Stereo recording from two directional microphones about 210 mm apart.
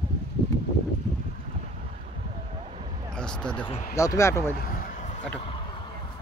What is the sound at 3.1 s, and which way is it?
Speech, 5° left (ahead or behind).